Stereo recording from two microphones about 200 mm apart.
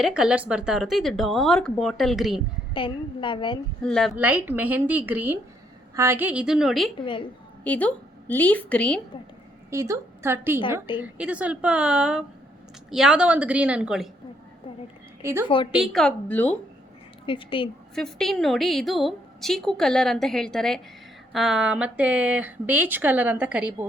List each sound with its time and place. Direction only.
0.0 s a woman's voice: 5° right (ahead or behind)
2.7 s a woman's voice: 25° left (ahead or behind)
3.8 s a woman's voice: centre (ahead or behind)
7.0 s a woman's voice: 25° left (ahead or behind)
7.6 s a woman's voice: 5° left (ahead or behind)
9.6 s a woman's voice: 15° right (ahead or behind)
15.2 s a woman's voice: 15° right (ahead or behind)
15.4 s a woman's voice: 25° left (ahead or behind)
15.7 s a woman's voice: centre (ahead or behind)
17.2 s a woman's voice: 25° left (ahead or behind)
17.9 s a woman's voice: centre (ahead or behind)